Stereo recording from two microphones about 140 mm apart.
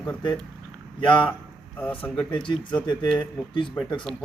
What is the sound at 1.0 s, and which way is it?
Speech, 35° left (ahead or behind).